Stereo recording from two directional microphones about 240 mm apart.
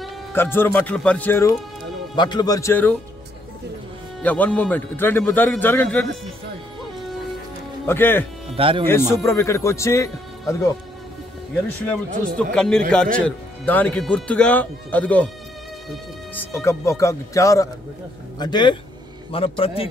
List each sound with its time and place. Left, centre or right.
0.0 s speech: centre
4.2 s speech: centre
7.8 s speech: centre
8.5 s speech: right
8.8 s speech: centre
12.5 s a man's voice: centre; by 19.9 s left